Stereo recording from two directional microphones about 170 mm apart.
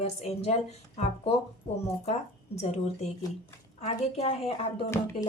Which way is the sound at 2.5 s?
40° left (ahead or behind).